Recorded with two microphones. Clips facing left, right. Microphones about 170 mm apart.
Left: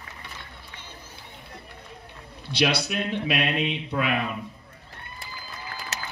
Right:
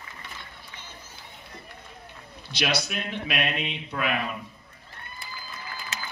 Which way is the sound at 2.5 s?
30° left (ahead or behind).